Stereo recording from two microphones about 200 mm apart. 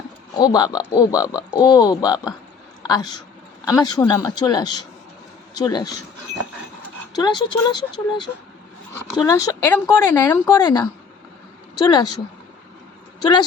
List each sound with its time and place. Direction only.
0.3 s speech: 20° left (ahead or behind)
7.2 s speech: 20° left (ahead or behind)
11.9 s speech: 20° left (ahead or behind)